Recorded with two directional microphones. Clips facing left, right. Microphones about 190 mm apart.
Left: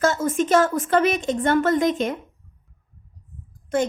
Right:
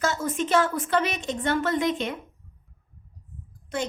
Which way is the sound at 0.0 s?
50° left (ahead or behind).